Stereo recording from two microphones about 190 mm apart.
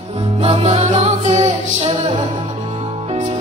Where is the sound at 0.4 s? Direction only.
30° right (ahead or behind).